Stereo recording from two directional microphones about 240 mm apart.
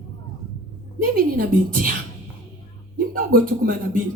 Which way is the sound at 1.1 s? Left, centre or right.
Right.